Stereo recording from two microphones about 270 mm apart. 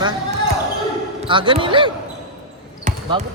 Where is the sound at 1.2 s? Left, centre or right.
Centre.